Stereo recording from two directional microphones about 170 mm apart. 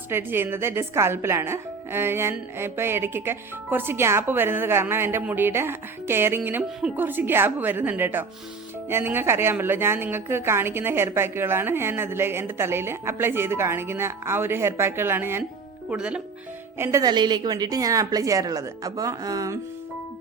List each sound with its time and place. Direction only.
0.1 s a woman's voice: 15° right (ahead or behind)